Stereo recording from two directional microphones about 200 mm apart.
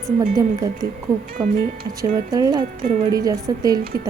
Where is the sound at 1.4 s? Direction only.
15° right (ahead or behind).